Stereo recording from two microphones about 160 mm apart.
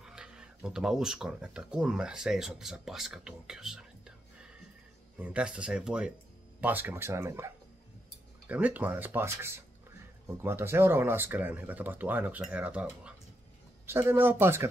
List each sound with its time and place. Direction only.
0.0 s speech: 5° right (ahead or behind)
5.2 s speech: 5° right (ahead or behind)